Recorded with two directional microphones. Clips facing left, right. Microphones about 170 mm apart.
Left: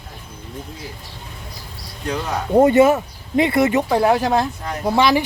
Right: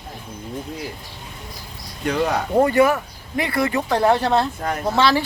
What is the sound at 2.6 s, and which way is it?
Speech, 20° left (ahead or behind).